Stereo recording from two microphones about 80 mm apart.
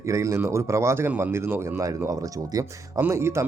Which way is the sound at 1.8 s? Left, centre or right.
Right.